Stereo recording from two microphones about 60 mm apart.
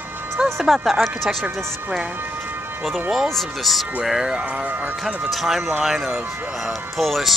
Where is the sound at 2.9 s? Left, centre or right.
Centre.